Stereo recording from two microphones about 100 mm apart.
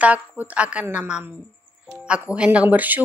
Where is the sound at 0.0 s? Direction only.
15° right (ahead or behind).